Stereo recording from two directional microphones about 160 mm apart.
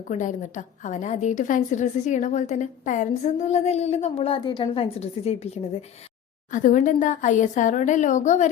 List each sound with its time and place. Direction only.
0.1 s a woman's voice: 50° left (ahead or behind)
6.5 s a woman's voice: 50° left (ahead or behind)